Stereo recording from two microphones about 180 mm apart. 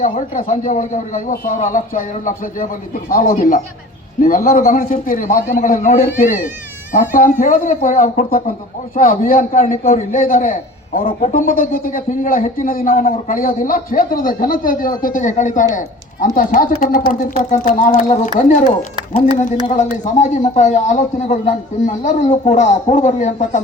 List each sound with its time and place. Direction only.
0.0 s a man's voice: 45° left (ahead or behind)